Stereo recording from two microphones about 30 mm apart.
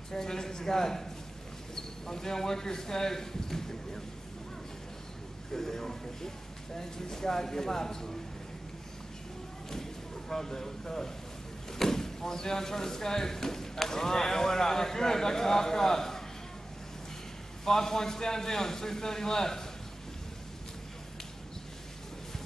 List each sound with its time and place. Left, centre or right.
0.1 s speech: centre
2.0 s speech: centre
5.5 s speech: centre
10.3 s speech: centre
17.6 s speech: centre